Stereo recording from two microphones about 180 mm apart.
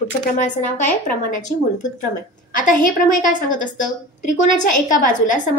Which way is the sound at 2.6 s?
45° left (ahead or behind).